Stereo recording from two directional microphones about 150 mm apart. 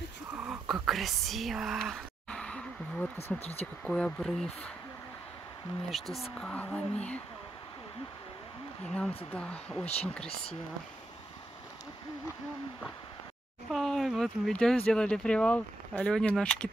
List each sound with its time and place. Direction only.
0.4 s whispering: 5° right (ahead or behind)
3.3 s speech: 45° left (ahead or behind)
3.8 s speech: 5° left (ahead or behind)
5.9 s speech: centre (ahead or behind)
8.8 s speech: 5° left (ahead or behind)
13.7 s speech: centre (ahead or behind)